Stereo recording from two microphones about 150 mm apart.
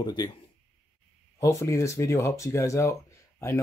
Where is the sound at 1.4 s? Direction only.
20° left (ahead or behind).